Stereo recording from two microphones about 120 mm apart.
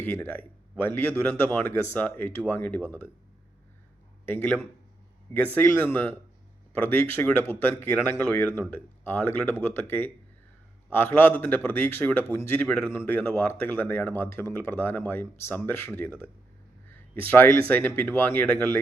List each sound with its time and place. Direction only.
0.0 s speech: 15° left (ahead or behind)
4.3 s speech: 15° left (ahead or behind)
10.9 s speech: 15° left (ahead or behind)
12.6 s speech: 10° left (ahead or behind)